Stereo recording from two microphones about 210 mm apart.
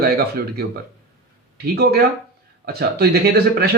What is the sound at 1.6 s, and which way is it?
Speech, 50° right (ahead or behind).